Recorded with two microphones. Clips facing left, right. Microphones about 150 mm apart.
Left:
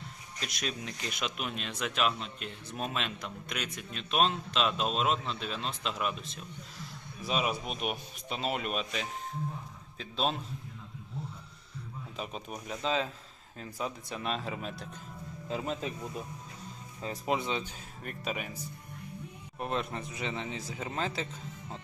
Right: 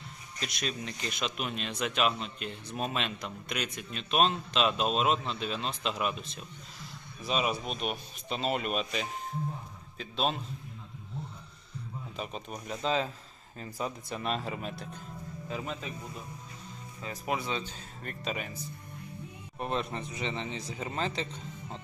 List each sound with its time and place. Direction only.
0.3 s speech: 5° left (ahead or behind)
12.1 s speech: centre (ahead or behind)
15.4 s speech: 30° left (ahead or behind)
17.0 s speech: 25° left (ahead or behind); by 18.5 s 5° left (ahead or behind)
19.5 s speech: centre (ahead or behind)